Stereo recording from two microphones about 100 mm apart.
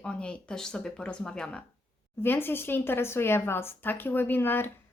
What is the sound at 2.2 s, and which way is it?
Speech, 20° left (ahead or behind).